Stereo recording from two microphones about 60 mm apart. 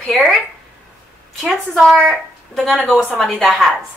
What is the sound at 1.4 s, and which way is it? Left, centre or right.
A woman's voice, centre.